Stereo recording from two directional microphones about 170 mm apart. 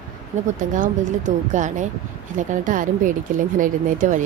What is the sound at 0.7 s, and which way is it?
A woman's voice, 50° right (ahead or behind).